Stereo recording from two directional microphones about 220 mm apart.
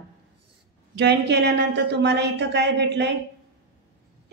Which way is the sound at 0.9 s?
50° right (ahead or behind).